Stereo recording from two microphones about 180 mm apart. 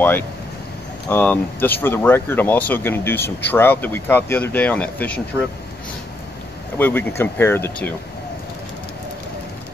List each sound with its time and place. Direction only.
1.0 s speech: 10° left (ahead or behind)
6.8 s speech: 10° left (ahead or behind)